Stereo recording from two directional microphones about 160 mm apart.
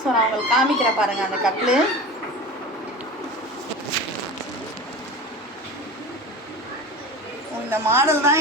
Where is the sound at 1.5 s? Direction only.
5° right (ahead or behind).